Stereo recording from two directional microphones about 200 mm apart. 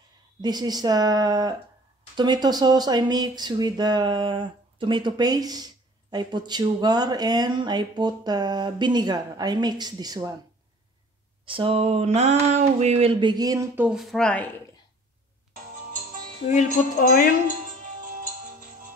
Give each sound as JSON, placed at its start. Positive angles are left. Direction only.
{"t": 0.4, "sound": "speech", "side_deg": -20}
{"t": 11.4, "sound": "a sound", "side_deg": -25}
{"t": 13.8, "sound": "speech", "side_deg": 0}
{"t": 16.4, "sound": "speech", "side_deg": 45}